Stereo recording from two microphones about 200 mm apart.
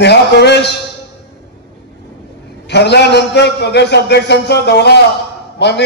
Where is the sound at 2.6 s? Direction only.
55° left (ahead or behind).